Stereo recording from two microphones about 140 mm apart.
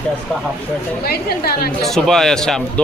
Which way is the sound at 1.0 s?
90° left.